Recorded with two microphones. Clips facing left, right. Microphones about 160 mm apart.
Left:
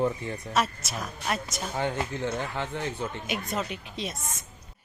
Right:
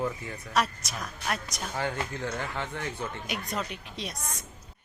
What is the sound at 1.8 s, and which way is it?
Speech, 20° left (ahead or behind).